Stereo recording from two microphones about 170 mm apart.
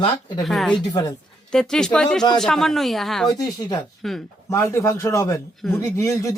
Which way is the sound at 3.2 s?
20° left (ahead or behind).